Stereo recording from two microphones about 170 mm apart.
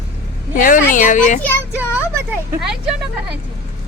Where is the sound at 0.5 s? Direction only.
55° left (ahead or behind).